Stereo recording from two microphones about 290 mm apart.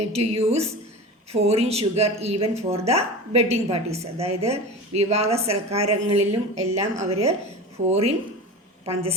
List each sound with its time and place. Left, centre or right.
0.1 s speech: right